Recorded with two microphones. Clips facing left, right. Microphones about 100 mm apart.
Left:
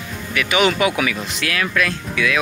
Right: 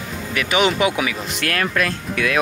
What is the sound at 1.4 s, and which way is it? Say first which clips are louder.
Speech: right 1 dB; 45° right (ahead or behind).